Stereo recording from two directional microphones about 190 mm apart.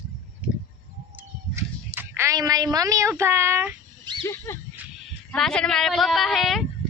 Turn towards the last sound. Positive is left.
turn(degrees=0)  # may be behind; listen again after turning